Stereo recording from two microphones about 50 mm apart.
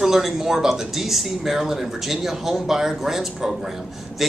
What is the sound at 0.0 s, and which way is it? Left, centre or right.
Speech, centre.